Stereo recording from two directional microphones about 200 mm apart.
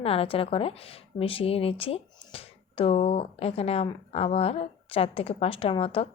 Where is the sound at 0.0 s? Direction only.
30° left (ahead or behind).